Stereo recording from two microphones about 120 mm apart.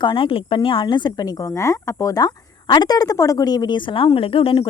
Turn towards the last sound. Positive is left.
turn(degrees=50)  # may be behind; listen again after turning